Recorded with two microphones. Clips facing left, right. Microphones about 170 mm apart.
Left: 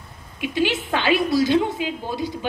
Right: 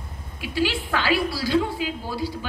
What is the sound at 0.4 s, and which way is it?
A woman's voice, 20° left (ahead or behind).